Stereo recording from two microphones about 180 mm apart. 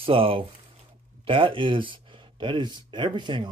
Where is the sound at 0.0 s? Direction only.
30° right (ahead or behind).